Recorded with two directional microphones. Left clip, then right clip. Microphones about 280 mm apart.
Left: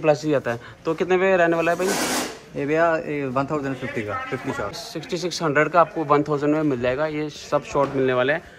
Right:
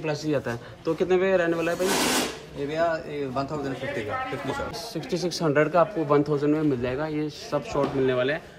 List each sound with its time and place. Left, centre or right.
0.0 s speech: centre
2.7 s speech: centre
4.9 s speech: centre